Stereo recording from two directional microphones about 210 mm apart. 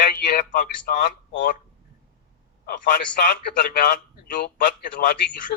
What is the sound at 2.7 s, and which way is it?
Speech, 40° left (ahead or behind).